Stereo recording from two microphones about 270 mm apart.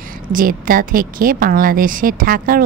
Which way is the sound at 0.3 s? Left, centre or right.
Right.